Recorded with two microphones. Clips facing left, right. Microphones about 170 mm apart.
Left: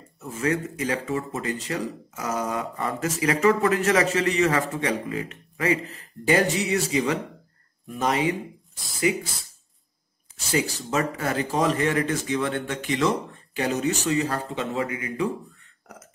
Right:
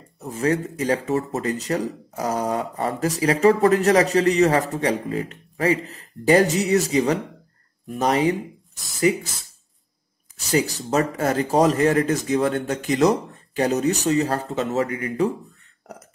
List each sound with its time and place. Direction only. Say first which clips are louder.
0.2 s speech: right 3 dB; 35° right (ahead or behind)
10.4 s speech: right 4 dB; 40° right (ahead or behind)